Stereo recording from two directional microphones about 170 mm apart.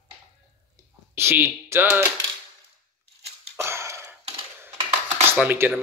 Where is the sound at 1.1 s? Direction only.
15° right (ahead or behind).